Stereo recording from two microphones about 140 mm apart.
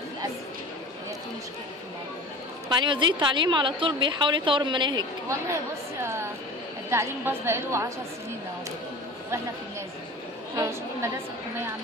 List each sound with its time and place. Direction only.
2.8 s a woman's voice: 35° right (ahead or behind)
5.5 s a woman's voice: 20° right (ahead or behind)
10.5 s a woman's voice: 20° right (ahead or behind)